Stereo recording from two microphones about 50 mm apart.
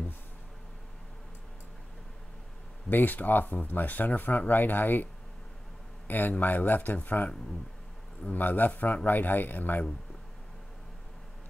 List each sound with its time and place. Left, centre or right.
2.9 s speech: left